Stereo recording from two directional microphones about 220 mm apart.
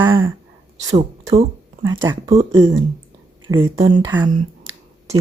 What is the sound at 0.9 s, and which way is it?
Speech, 25° right (ahead or behind).